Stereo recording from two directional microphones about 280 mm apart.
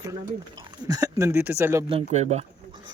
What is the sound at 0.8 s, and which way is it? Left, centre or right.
Speech, centre.